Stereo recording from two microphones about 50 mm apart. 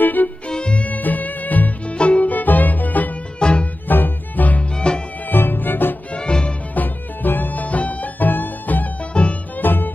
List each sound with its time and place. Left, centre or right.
0.0 s music: left
0.5 s music: centre
0.8 s music: left
3.3 s music: centre
3.9 s music: left
4.7 s music: centre
5.3 s music: left
6.1 s music: centre
6.7 s music: left
9.1 s music: left
9.6 s music: left